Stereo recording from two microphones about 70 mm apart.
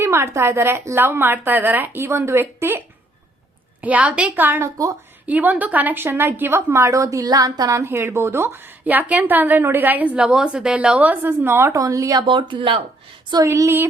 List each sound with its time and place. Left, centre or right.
0.0 s speech: right
3.8 s a woman's voice: right
4.6 s speech: right
5.2 s a woman's voice: right
6.7 s a woman's voice: right
7.7 s speech: right
8.8 s a woman's voice: right
10.2 s a woman's voice: centre; by 11.7 s right
11.7 s speech: right
12.5 s speech: right
13.4 s speech: right